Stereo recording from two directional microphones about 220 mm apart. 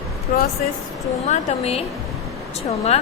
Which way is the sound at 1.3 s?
30° left (ahead or behind).